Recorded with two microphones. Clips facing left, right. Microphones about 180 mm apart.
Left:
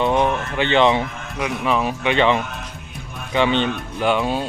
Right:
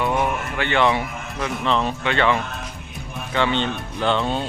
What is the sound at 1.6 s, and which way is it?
Speech, 10° left (ahead or behind).